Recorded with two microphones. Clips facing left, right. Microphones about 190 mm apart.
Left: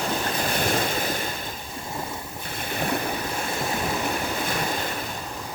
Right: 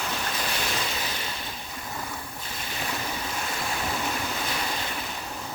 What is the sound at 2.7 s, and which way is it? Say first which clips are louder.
Stream: left 7 dB; 55° left (ahead or behind).